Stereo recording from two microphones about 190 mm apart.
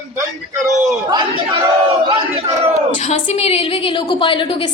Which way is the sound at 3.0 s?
35° left (ahead or behind).